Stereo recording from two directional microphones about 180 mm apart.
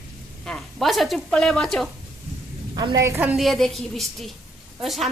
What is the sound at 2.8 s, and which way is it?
Speech, 20° right (ahead or behind).